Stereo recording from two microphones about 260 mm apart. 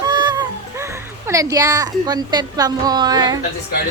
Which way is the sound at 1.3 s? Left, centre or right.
Centre.